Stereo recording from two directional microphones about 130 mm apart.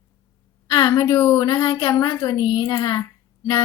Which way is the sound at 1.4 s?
35° left (ahead or behind).